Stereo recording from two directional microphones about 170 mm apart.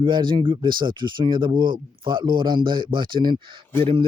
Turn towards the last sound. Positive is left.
turn(degrees=-35)  # may be behind; listen again after turning